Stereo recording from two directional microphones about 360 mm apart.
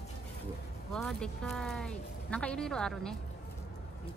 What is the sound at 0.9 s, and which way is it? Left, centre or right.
Speech, centre.